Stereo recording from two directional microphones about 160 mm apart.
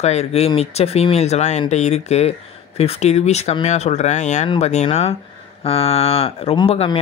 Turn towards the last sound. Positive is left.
turn(degrees=35)  # may be behind; listen again after turning